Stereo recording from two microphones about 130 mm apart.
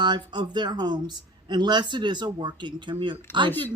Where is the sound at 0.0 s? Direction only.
35° right (ahead or behind).